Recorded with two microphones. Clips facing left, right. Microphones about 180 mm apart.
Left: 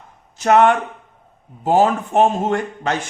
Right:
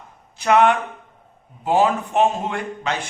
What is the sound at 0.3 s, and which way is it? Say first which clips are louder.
A man's voice: left 2 dB; 45° left (ahead or behind).